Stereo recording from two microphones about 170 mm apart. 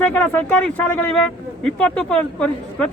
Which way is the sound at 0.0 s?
10° left (ahead or behind).